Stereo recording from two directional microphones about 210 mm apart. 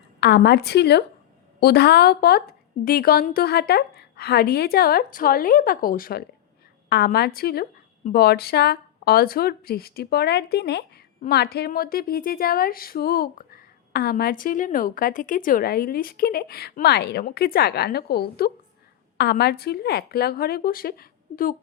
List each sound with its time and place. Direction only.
0.2 s a woman's voice: 50° left (ahead or behind)